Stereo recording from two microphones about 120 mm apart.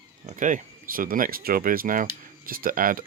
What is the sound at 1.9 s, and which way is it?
Speech, 90° right.